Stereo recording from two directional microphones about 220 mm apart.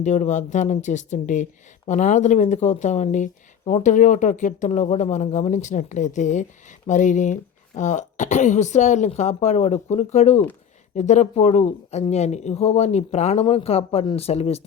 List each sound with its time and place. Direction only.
0.0 s speech: 35° left (ahead or behind)